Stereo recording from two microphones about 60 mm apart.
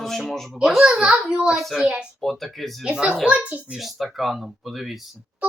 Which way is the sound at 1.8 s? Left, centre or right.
Centre.